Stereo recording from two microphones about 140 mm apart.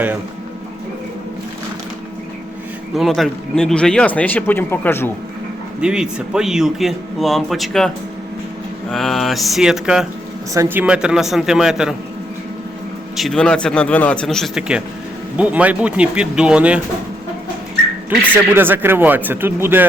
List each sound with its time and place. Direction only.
2.9 s speech: centre (ahead or behind); by 5.1 s 15° left (ahead or behind)
5.8 s speech: 5° right (ahead or behind)
8.9 s speech: centre (ahead or behind)
10.5 s speech: 20° right (ahead or behind)
10.8 s speech: 5° right (ahead or behind)
13.1 s speech: 5° left (ahead or behind)
18.1 s speech: 10° right (ahead or behind)